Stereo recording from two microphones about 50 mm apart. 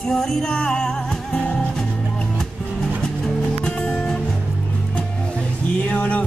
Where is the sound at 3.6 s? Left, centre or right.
Centre.